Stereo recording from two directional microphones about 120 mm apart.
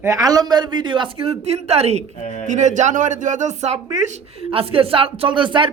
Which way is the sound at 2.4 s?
90° right.